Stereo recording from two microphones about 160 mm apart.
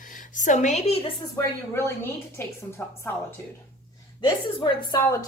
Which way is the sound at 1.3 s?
15° left (ahead or behind).